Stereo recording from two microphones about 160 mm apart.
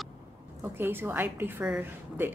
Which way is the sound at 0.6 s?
15° right (ahead or behind).